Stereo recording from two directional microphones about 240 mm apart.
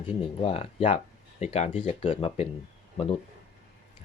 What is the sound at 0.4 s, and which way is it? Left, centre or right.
Speech, left.